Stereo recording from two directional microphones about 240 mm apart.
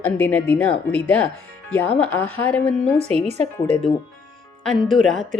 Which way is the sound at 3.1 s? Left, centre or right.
Right.